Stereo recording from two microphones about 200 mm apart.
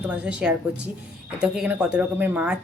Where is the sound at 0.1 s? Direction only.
5° right (ahead or behind).